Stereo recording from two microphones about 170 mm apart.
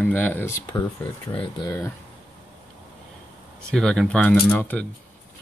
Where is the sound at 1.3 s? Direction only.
30° left (ahead or behind).